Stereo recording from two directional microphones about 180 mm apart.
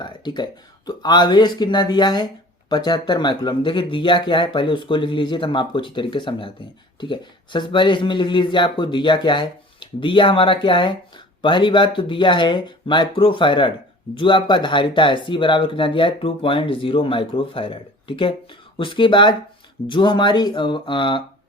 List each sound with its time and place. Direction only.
0.0 s a sound: 25° left (ahead or behind)
0.9 s speech: 25° left (ahead or behind)
18.8 s speech: 30° left (ahead or behind)